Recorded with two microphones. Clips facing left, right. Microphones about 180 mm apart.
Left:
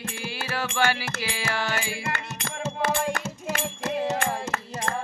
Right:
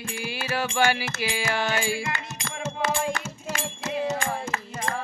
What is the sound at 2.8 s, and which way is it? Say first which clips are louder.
Music: left 1 dB; 60° left (ahead or behind).